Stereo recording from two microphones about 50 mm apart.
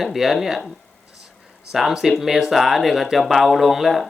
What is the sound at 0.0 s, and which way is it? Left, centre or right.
Speech, centre.